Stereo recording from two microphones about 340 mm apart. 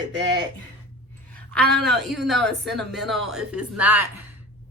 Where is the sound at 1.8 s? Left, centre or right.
Centre.